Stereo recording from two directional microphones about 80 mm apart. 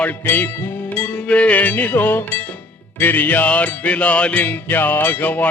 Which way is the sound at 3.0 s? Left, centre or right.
Left.